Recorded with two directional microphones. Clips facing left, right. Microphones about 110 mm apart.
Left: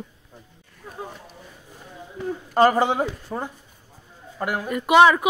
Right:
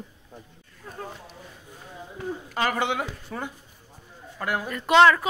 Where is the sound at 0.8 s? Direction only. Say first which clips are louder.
Left 1 dB; 15° left (ahead or behind).